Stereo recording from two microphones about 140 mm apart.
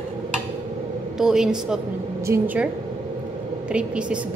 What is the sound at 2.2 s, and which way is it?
Speech, 15° right (ahead or behind).